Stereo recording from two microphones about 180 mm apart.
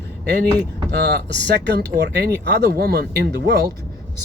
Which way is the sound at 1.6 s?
65° right (ahead or behind).